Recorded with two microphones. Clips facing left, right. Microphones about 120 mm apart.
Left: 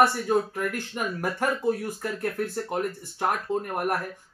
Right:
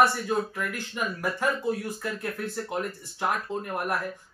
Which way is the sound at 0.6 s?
50° left (ahead or behind).